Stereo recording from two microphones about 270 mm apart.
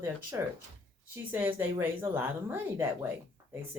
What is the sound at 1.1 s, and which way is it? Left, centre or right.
Speech, centre.